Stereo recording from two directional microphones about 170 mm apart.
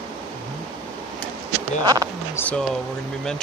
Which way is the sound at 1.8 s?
20° right (ahead or behind).